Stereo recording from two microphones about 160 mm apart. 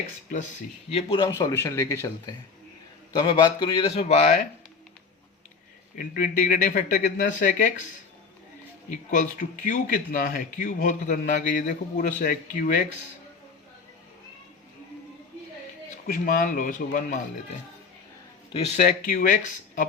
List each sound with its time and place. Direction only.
0.9 s speech: 35° left (ahead or behind)
1.3 s speech: 20° left (ahead or behind); by 4.4 s 50° left (ahead or behind)
6.0 s a man's voice: 60° left (ahead or behind)
8.9 s a man's voice: 50° left (ahead or behind)
16.0 s a man's voice: 55° left (ahead or behind)
18.5 s speech: 40° left (ahead or behind)
19.0 s a man's voice: 60° left (ahead or behind)